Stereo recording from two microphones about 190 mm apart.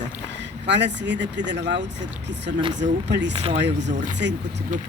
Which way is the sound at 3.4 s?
30° right (ahead or behind).